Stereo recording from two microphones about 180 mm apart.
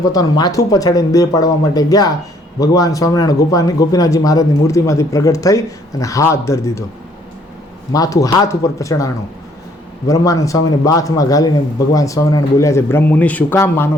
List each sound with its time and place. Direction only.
0.0 s speech: 20° left (ahead or behind)
7.9 s speech: 20° left (ahead or behind)